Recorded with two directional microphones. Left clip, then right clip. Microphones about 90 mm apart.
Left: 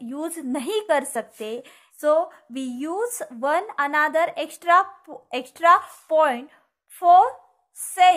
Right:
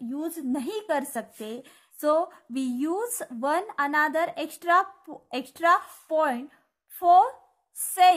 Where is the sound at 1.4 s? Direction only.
15° right (ahead or behind).